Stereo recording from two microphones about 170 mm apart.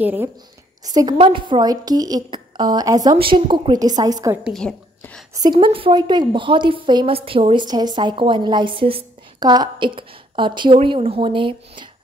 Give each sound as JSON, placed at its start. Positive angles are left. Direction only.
{"t": 0.0, "sound": "a woman's voice", "side_deg": -10}
{"t": 0.8, "sound": "a woman's voice", "side_deg": -25}
{"t": 4.5, "sound": "a woman's voice", "side_deg": 5}
{"t": 5.3, "sound": "a woman's voice", "side_deg": -25}